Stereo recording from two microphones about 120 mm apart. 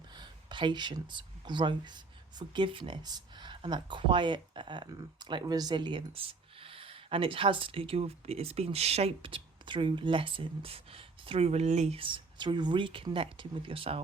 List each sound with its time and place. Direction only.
0.2 s speech: 40° right (ahead or behind); by 11.9 s 70° right (ahead or behind)
11.9 s speech: 45° right (ahead or behind)